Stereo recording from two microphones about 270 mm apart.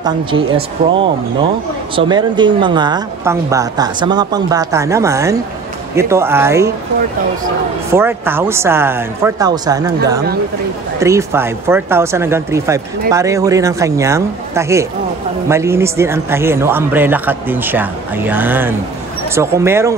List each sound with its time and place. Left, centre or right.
0.0 s speech: centre
7.9 s speech: centre
11.0 s speech: centre